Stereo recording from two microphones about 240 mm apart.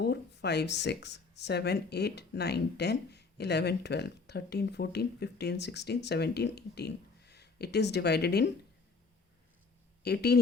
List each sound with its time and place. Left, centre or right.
0.0 s speech: left
10.0 s speech: left